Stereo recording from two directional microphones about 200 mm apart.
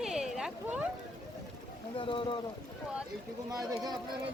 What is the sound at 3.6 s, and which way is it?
Speech, 20° right (ahead or behind).